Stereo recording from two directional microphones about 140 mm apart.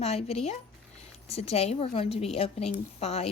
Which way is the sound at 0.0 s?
50° left (ahead or behind).